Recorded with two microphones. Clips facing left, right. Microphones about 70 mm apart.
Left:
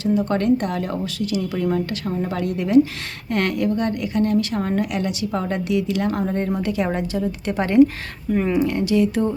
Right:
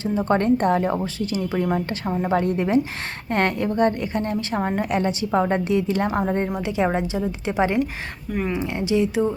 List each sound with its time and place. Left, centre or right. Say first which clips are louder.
0.0 s speech: left 1 dB; right
8.3 s speech: left 5 dB; centre
8.5 s speech: left 2 dB; right